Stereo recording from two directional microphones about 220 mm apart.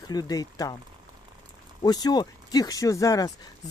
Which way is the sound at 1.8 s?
20° left (ahead or behind).